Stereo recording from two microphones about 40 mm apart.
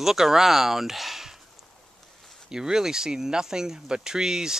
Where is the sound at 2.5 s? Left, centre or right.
Centre.